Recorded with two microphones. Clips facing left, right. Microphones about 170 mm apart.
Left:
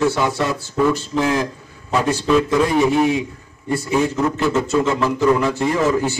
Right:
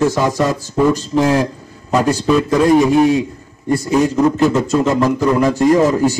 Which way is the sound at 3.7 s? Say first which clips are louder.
Right 4 dB; 35° right (ahead or behind).